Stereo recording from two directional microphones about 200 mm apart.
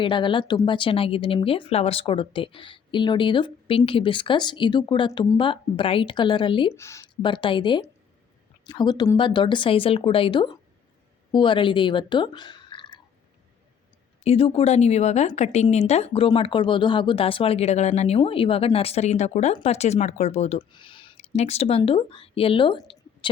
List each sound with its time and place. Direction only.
0.0 s speech: 25° left (ahead or behind)
6.7 s speech: 15° left (ahead or behind)
14.3 s a woman's voice: 30° left (ahead or behind)